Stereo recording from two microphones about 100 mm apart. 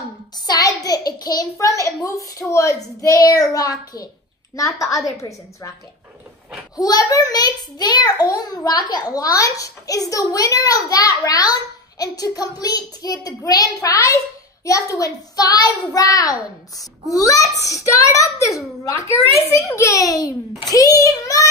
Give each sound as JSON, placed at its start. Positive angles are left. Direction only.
{"t": 0.5, "sound": "a child's voice", "side_deg": 35}
{"t": 6.8, "sound": "a child's voice", "side_deg": 40}